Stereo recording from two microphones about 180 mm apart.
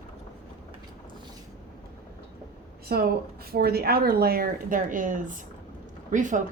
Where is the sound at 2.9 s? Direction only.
60° right (ahead or behind).